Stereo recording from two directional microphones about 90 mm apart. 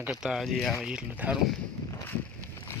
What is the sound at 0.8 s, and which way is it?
Speech, 10° right (ahead or behind).